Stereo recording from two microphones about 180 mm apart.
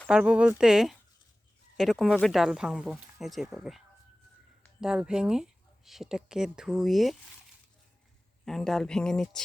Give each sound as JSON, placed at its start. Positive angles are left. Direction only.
{"t": 0.1, "sound": "speech", "side_deg": -5}
{"t": 8.4, "sound": "speech", "side_deg": 0}